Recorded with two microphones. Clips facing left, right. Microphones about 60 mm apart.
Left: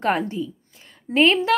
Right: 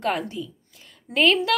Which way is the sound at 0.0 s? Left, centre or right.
Left.